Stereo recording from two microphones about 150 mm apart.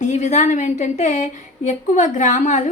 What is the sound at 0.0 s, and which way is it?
A woman's voice, 50° left (ahead or behind).